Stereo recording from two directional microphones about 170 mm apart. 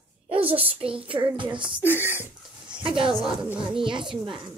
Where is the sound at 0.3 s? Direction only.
35° right (ahead or behind).